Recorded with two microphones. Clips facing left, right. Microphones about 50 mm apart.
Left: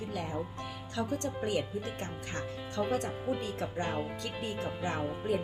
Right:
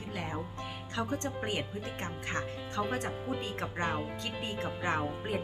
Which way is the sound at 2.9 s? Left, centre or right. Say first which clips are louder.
Left 2 dB; right.